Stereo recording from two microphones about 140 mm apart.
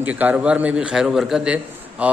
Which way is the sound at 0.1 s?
10° right (ahead or behind).